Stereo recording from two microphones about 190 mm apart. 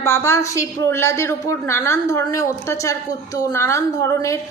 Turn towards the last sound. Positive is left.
turn(degrees=15)  # may be behind; listen again after turning